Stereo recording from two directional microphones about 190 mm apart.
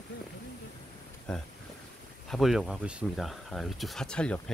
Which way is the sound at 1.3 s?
5° left (ahead or behind).